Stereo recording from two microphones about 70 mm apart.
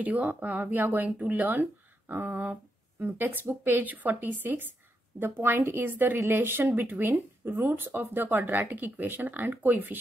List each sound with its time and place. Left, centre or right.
0.0 s a woman's voice: right